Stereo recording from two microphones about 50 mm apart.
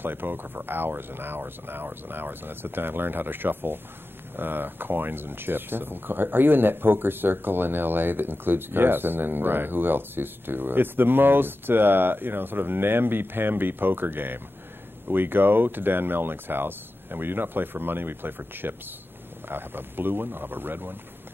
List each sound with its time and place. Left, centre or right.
0.0 s speech: right